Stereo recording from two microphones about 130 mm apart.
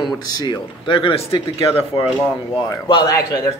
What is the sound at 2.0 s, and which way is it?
Speech, 5° right (ahead or behind).